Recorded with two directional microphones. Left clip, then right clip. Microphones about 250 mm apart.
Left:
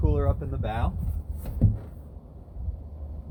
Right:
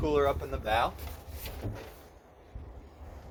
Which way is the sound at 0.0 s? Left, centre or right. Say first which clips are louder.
Right 3 dB; centre.